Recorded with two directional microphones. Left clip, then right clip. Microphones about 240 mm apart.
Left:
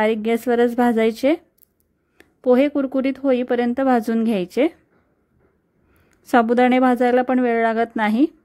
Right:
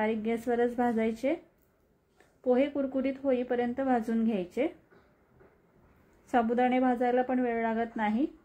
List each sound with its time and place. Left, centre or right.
0.0 s a woman's voice: left
6.3 s a woman's voice: left